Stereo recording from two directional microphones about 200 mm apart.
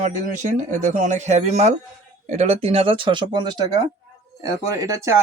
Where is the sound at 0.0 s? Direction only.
40° right (ahead or behind).